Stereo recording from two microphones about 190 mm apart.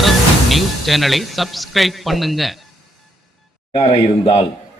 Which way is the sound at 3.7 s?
30° left (ahead or behind).